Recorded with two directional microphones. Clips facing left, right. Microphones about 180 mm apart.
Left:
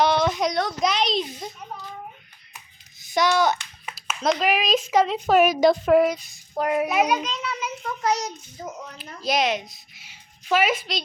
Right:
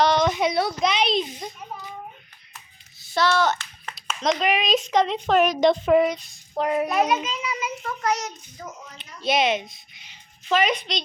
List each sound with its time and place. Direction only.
0.0 s child singing: 10° left (ahead or behind)
0.3 s a woman's voice: 5° right (ahead or behind)
3.0 s a child's voice: 15° left (ahead or behind); by 7.9 s 5° right (ahead or behind)
8.0 s a child's voice: 30° left (ahead or behind)
9.2 s a child's voice: centre (ahead or behind)